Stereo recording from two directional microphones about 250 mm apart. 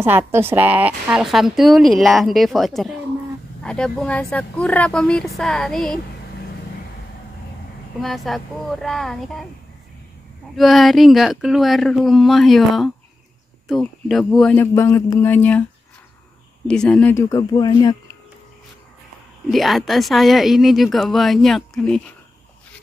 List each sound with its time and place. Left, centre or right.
0.0 s a woman's voice: centre
8.0 s a woman's voice: centre
10.5 s a woman's voice: centre
16.6 s speech: centre
19.5 s a woman's voice: centre